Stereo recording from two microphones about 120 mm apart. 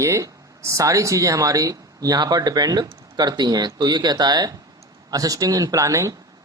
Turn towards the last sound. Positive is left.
turn(degrees=-25)  # may be behind; listen again after turning